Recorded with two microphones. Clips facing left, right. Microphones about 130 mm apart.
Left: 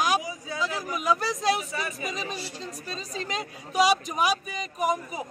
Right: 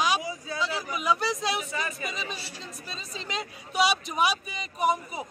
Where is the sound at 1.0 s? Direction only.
45° left (ahead or behind).